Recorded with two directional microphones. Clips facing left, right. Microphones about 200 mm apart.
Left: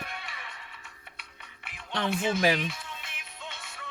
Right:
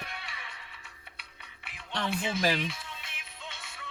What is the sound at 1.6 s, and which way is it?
Music, 50° left (ahead or behind).